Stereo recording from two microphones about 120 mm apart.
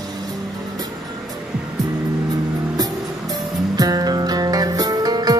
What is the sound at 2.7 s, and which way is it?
Music, 30° right (ahead or behind).